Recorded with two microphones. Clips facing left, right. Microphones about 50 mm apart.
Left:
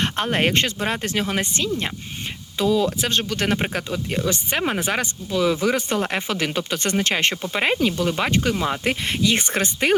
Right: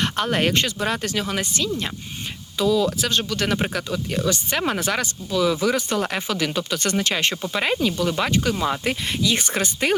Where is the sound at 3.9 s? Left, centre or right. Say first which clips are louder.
Even; left.